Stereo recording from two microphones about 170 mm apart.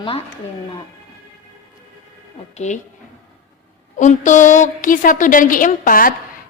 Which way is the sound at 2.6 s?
45° left (ahead or behind).